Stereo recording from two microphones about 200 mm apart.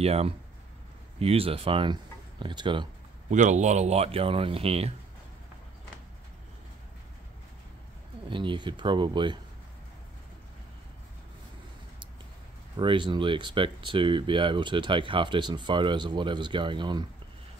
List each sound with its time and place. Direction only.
0.0 s speech: 30° right (ahead or behind)
3.3 s speech: 35° right (ahead or behind)
8.3 s speech: 25° right (ahead or behind)
12.7 s speech: 25° right (ahead or behind)